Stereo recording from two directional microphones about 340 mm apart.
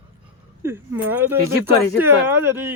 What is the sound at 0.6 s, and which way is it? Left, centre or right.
Speech, centre.